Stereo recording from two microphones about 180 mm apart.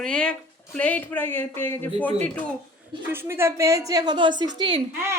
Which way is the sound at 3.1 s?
15° right (ahead or behind).